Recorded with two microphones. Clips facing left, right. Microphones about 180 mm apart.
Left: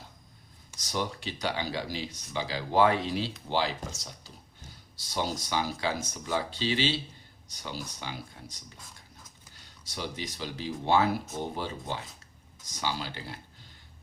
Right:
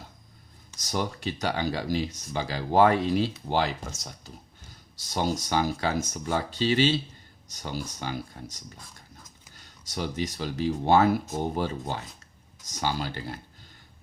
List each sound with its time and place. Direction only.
0.8 s speech: 45° right (ahead or behind)
9.8 s speech: 45° right (ahead or behind)